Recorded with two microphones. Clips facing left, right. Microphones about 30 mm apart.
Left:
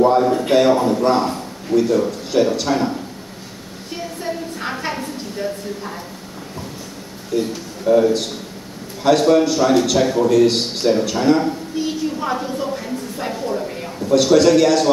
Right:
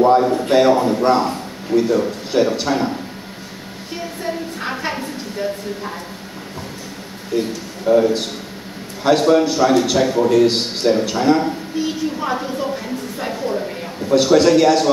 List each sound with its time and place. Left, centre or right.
0.0 s speech: centre
1.7 s speech: centre
4.2 s a woman's voice: centre
7.3 s a woman's voice: centre